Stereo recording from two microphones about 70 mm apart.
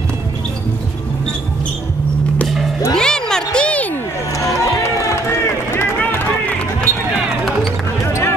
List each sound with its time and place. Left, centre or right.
2.4 s music: centre
2.9 s a sound: centre
4.4 s run: left
5.9 s music: left
8.0 s basketball bounce: left